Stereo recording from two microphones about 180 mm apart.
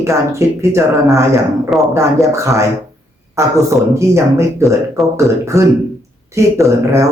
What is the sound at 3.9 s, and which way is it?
Speech, 15° right (ahead or behind).